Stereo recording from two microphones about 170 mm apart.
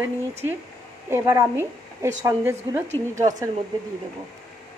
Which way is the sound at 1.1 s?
20° right (ahead or behind).